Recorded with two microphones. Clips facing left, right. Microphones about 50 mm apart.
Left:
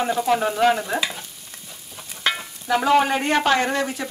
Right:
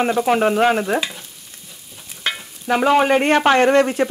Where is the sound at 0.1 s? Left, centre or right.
Right.